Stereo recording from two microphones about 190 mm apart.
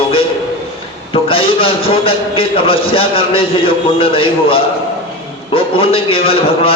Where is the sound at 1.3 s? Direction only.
30° left (ahead or behind).